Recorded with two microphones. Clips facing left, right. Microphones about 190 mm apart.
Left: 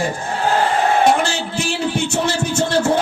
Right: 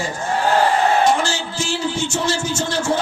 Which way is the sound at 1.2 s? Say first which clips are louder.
Left 2 dB; 60° left (ahead or behind).